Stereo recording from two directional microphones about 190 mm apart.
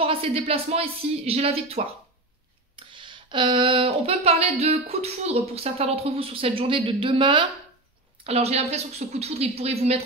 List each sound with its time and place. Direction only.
0.0 s speech: 30° right (ahead or behind)